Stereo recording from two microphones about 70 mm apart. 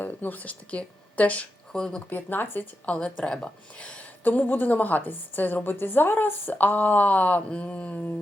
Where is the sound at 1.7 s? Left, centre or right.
Centre.